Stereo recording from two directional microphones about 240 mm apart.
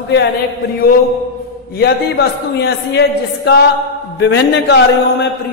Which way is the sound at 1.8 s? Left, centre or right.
Left.